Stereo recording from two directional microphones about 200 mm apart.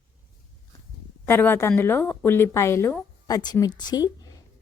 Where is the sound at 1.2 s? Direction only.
10° left (ahead or behind).